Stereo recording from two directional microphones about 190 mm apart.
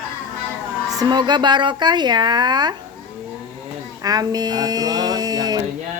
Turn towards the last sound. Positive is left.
turn(degrees=-20)  # may be behind; listen again after turning